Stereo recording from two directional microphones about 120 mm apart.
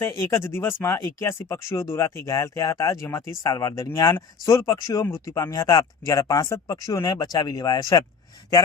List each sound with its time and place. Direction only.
0.0 s speech: 25° left (ahead or behind)